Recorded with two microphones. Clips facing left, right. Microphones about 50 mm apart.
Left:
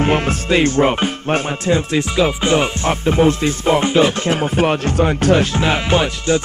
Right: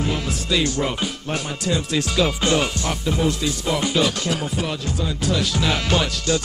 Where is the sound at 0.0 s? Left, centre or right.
Left.